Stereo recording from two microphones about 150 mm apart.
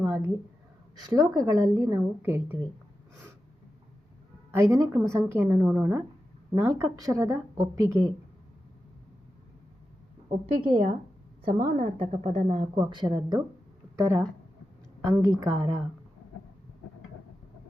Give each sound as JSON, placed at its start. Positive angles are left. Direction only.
{"t": 1.0, "sound": "a woman's voice", "side_deg": -30}
{"t": 4.5, "sound": "a woman's voice", "side_deg": -20}
{"t": 10.6, "sound": "a woman's voice", "side_deg": -40}
{"t": 12.7, "sound": "a woman's voice", "side_deg": -30}
{"t": 13.9, "sound": "a woman's voice", "side_deg": -20}